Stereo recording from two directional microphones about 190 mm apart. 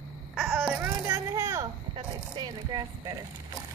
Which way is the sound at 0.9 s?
15° right (ahead or behind).